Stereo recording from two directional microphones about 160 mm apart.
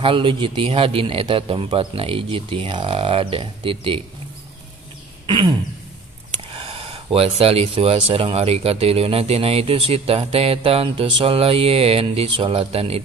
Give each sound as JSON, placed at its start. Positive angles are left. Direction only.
{"t": 0.0, "sound": "speech", "side_deg": -35}
{"t": 5.2, "sound": "throat clearing", "side_deg": -30}
{"t": 6.5, "sound": "speech", "side_deg": -35}